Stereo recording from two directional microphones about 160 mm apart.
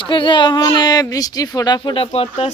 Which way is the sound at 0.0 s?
30° left (ahead or behind).